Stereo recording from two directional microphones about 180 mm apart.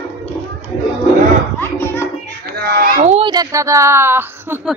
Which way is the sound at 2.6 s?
60° right (ahead or behind).